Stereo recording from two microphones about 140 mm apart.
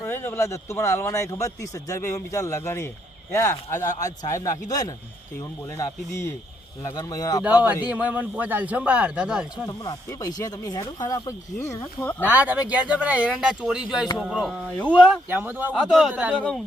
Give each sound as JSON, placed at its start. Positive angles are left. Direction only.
{"t": 0.0, "sound": "speech", "side_deg": 15}
{"t": 7.6, "sound": "speech", "side_deg": -10}
{"t": 9.6, "sound": "speech", "side_deg": 25}
{"t": 12.2, "sound": "a man's voice", "side_deg": -10}
{"t": 15.3, "sound": "speech", "side_deg": -15}
{"t": 15.7, "sound": "a man's voice", "side_deg": 0}
{"t": 16.3, "sound": "a man's voice", "side_deg": 5}